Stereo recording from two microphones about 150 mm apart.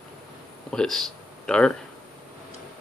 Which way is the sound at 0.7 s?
5° left (ahead or behind).